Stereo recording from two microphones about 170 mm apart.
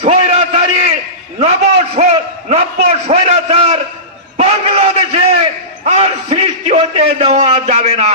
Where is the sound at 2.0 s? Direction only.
45° right (ahead or behind).